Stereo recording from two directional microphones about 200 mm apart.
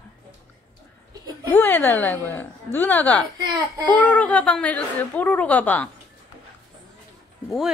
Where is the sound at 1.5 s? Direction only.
10° left (ahead or behind).